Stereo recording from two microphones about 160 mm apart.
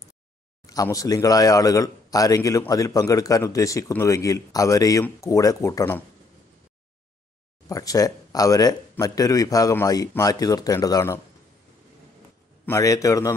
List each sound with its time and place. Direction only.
0.7 s a man's voice: 20° left (ahead or behind)
7.6 s a man's voice: 20° left (ahead or behind)
12.6 s a man's voice: 20° left (ahead or behind)